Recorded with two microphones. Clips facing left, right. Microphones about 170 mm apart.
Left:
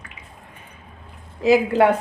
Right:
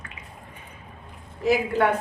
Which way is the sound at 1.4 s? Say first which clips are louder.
Left 6 dB; 90° left.